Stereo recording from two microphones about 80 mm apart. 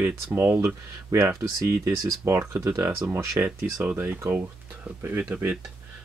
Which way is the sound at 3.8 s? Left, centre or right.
Right.